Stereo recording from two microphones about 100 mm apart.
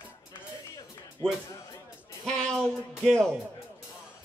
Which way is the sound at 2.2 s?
5° left (ahead or behind).